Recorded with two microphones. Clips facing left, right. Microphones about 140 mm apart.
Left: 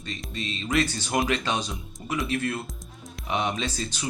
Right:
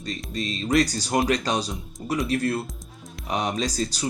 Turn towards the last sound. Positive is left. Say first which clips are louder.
# right 5 dB
turn(degrees=-40)  # may be behind; listen again after turning